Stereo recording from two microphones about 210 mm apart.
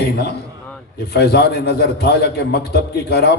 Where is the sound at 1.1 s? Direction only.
50° left (ahead or behind).